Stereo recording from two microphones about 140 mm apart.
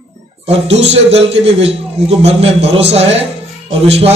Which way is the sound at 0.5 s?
45° right (ahead or behind).